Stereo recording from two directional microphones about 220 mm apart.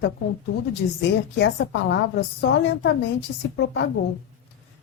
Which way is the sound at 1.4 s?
55° left (ahead or behind).